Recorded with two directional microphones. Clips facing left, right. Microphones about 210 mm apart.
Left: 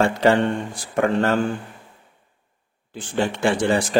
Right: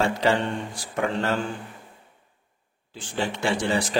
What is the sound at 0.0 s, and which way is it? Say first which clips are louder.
A man's voice: left 5 dB; 50° left (ahead or behind).